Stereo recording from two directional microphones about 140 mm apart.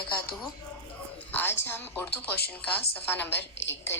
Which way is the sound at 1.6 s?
15° left (ahead or behind).